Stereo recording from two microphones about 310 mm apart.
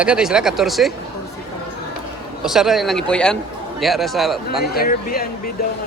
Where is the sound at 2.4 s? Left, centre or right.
Centre.